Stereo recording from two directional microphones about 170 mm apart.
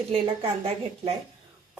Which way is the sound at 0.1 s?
35° right (ahead or behind).